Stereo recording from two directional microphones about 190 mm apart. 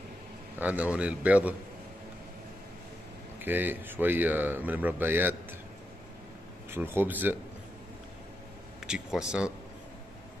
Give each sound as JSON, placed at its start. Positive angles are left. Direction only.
{"t": 0.6, "sound": "speech", "side_deg": -5}
{"t": 3.3, "sound": "speech", "side_deg": -10}
{"t": 6.7, "sound": "speech", "side_deg": -10}
{"t": 8.8, "sound": "speech", "side_deg": -5}